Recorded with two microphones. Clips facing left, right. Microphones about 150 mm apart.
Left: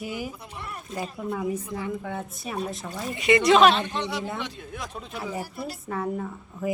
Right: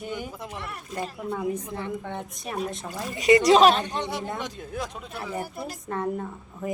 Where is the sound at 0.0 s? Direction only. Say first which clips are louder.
Even; 5° left (ahead or behind).